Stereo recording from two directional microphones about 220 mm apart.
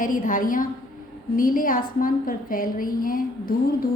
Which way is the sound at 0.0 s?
40° left (ahead or behind).